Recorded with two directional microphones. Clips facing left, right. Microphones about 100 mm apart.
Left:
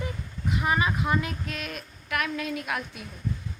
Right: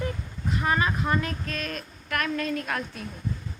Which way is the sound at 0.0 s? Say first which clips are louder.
Right 2 dB; 10° left (ahead or behind).